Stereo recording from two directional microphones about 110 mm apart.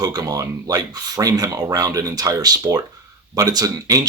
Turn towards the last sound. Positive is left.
turn(degrees=-35)  # may be behind; listen again after turning